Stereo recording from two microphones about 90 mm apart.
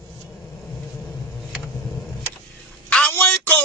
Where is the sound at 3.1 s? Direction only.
15° left (ahead or behind).